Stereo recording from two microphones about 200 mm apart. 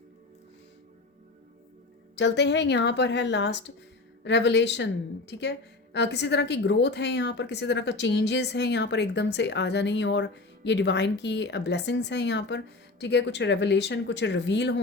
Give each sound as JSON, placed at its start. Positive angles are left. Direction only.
{"t": 2.1, "sound": "a woman's voice", "side_deg": 60}